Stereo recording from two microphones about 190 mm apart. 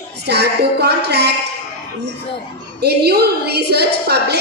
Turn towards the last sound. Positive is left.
turn(degrees=-60)  # may be behind; listen again after turning